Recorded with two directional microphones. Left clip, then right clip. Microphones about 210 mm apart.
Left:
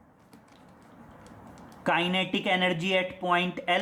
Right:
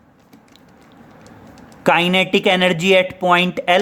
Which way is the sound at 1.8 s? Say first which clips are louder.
Right 12 dB; 40° right (ahead or behind).